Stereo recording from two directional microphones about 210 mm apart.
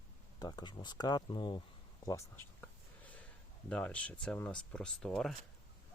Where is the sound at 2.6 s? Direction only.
5° left (ahead or behind).